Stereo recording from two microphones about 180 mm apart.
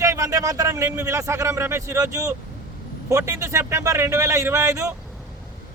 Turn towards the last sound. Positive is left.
turn(degrees=-15)  # may be behind; listen again after turning